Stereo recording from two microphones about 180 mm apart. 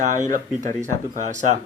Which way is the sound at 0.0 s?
45° right (ahead or behind).